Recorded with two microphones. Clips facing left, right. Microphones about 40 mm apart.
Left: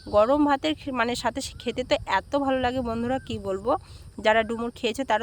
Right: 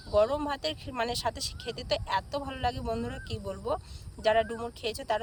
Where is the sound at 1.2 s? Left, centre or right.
Left.